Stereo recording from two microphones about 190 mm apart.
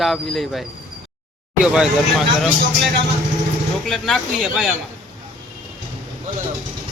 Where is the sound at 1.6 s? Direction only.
5° right (ahead or behind).